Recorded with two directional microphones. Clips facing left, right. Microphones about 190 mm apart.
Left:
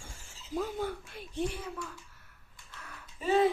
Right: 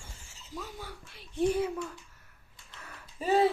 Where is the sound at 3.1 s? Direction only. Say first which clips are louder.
Right 1 dB; 35° right (ahead or behind).